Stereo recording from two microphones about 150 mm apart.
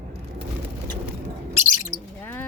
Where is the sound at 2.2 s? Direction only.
15° left (ahead or behind).